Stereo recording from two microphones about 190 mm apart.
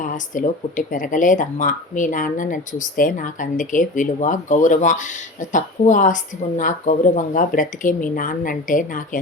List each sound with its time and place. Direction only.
0.0 s speech: 45° left (ahead or behind)